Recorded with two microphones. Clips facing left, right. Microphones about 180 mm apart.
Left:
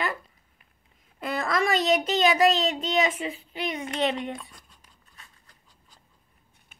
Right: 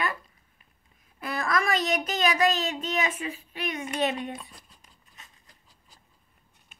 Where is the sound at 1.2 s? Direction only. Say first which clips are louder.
Left 2 dB; 25° left (ahead or behind).